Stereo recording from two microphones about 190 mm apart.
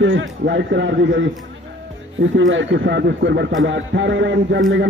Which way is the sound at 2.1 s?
85° right.